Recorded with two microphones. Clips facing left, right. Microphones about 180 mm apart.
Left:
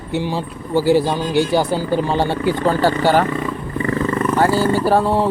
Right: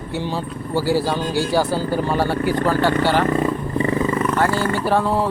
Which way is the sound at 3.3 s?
40° right (ahead or behind).